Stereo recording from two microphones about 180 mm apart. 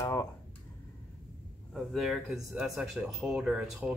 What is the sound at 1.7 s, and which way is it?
Speech, centre (ahead or behind).